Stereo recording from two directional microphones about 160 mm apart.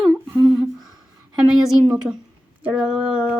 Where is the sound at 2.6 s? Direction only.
5° right (ahead or behind).